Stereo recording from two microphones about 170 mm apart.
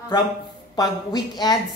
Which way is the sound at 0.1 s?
25° left (ahead or behind).